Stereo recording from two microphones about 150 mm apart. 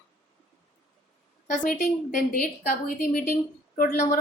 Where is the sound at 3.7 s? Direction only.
55° left (ahead or behind).